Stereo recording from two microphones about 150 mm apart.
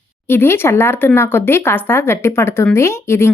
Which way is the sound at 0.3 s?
15° left (ahead or behind).